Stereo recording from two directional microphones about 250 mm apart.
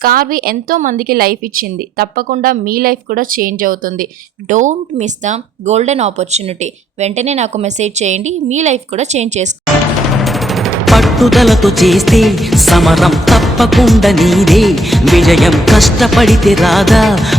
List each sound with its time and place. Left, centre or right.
0.0 s a woman's voice: right
10.2 s music: centre